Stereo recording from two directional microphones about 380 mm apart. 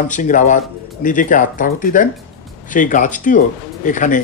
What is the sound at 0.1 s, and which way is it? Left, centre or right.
Speech, centre.